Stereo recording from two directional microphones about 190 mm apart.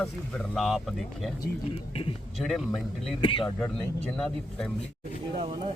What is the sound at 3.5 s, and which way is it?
A man's voice, 5° left (ahead or behind).